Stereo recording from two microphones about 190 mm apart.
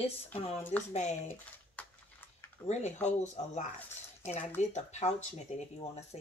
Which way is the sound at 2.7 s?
35° left (ahead or behind).